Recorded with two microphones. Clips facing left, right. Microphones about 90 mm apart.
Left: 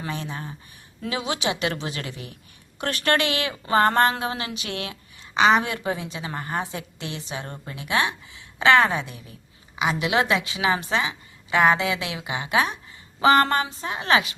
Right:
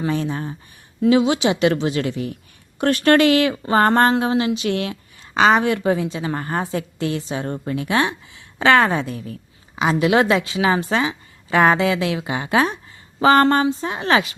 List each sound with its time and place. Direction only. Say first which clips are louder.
0.0 s speech: right 9 dB; 35° right (ahead or behind)